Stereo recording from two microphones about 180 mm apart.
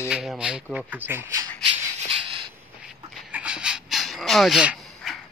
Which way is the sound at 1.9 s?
30° right (ahead or behind).